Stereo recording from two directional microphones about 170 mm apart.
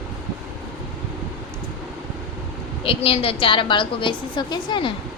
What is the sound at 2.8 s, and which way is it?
A woman's voice, 35° left (ahead or behind).